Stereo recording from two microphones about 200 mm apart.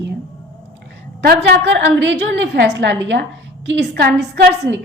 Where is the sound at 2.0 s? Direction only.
65° right (ahead or behind).